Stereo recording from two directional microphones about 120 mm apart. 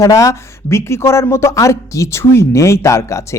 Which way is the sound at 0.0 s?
25° left (ahead or behind).